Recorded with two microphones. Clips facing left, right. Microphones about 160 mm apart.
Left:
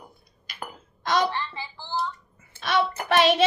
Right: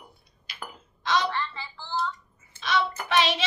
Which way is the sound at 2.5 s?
55° left (ahead or behind).